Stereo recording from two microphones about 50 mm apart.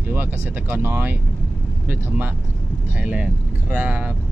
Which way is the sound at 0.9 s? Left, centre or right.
Right.